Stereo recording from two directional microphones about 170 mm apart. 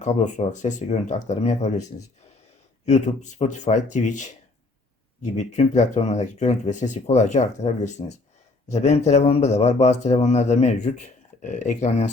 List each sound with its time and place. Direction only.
0.0 s speech: 45° left (ahead or behind)
5.4 s speech: 40° left (ahead or behind)